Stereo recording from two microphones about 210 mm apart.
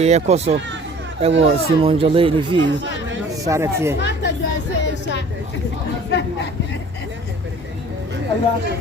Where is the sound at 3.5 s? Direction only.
10° right (ahead or behind).